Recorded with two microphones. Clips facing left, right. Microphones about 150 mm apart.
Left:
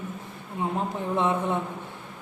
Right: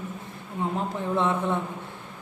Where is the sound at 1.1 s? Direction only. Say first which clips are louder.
Even; 15° left (ahead or behind).